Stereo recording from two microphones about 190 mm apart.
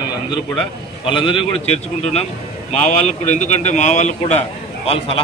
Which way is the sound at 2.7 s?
35° left (ahead or behind).